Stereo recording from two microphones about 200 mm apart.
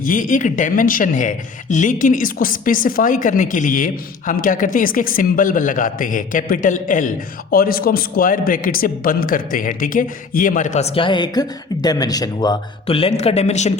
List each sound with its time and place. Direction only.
0.0 s a man's voice: 40° left (ahead or behind)